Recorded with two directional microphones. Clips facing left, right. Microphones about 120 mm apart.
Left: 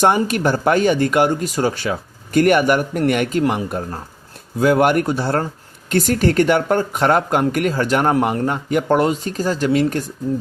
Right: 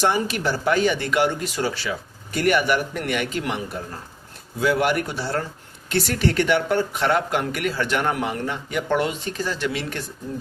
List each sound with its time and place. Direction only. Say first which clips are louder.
0.0 s speech: left 6 dB; 50° left (ahead or behind)